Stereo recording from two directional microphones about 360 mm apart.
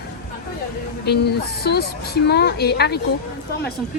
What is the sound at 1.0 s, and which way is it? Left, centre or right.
Speech, left.